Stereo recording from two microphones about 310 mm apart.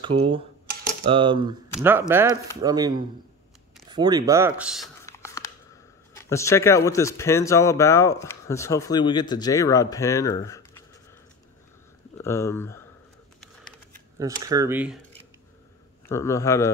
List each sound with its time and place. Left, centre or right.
0.0 s speech: centre
3.9 s a sound: centre
6.1 s speech: centre
12.2 s speech: centre
14.1 s speech: centre
16.1 s speech: centre